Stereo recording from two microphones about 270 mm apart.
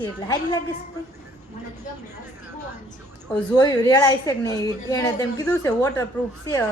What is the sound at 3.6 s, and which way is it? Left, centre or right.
A woman's voice, centre.